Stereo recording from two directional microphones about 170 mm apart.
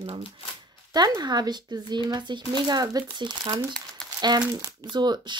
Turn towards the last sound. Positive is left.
turn(degrees=-25)  # may be behind; listen again after turning